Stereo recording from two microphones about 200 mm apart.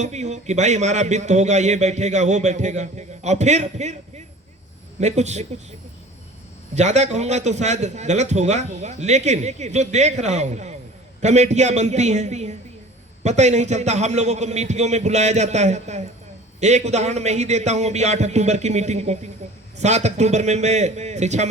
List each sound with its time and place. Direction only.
0.0 s a man's voice: 35° right (ahead or behind)
4.9 s a man's voice: 35° right (ahead or behind)
6.7 s a man's voice: 35° right (ahead or behind)